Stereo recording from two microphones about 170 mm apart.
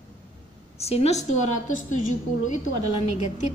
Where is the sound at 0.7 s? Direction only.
35° left (ahead or behind).